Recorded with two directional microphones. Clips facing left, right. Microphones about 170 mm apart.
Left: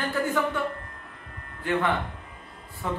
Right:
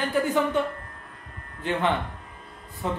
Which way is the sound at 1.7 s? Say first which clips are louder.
Left 1 dB; 20° right (ahead or behind).